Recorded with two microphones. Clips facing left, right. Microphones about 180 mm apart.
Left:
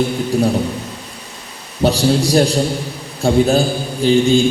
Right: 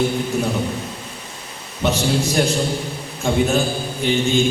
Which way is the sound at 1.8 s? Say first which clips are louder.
Left 5 dB; 35° left (ahead or behind).